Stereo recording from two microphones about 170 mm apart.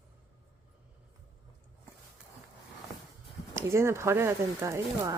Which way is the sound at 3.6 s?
15° right (ahead or behind).